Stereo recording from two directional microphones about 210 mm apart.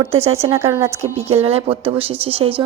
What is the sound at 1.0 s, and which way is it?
A woman's voice, 30° right (ahead or behind).